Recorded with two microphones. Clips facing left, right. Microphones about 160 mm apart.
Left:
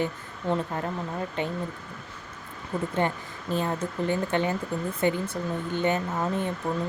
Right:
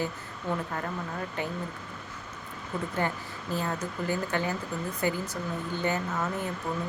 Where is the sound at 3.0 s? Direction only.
25° left (ahead or behind).